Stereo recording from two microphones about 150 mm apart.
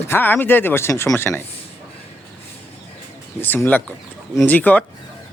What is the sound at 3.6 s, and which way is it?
Speech, 5° left (ahead or behind).